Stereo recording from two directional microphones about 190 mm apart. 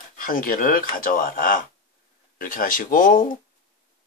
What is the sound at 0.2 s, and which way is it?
Speech, 45° left (ahead or behind).